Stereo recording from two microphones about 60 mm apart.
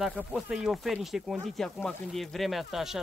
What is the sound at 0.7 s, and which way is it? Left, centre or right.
Speech, centre.